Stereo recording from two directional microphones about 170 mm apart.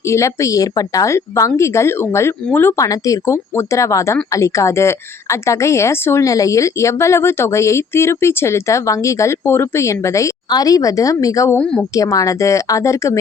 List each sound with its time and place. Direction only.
0.1 s a woman's voice: 15° left (ahead or behind)
11.6 s a woman's voice: 5° left (ahead or behind)
11.9 s speech: 20° left (ahead or behind)